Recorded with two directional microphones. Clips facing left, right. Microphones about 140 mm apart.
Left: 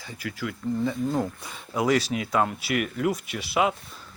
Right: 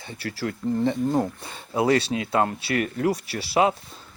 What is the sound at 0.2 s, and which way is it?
Speech, 35° right (ahead or behind).